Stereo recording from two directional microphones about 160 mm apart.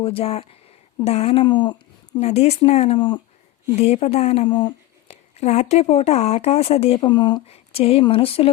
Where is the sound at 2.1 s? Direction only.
40° left (ahead or behind).